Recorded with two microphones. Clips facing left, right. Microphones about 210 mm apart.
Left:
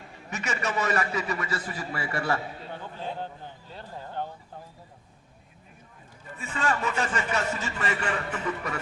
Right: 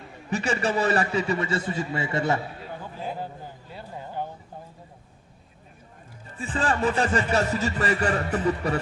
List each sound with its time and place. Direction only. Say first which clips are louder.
0.3 s a man's voice: right 6 dB; 30° right (ahead or behind)
2.8 s a sound: right 2 dB; 10° right (ahead or behind)
6.2 s speech: right 3 dB; 30° right (ahead or behind)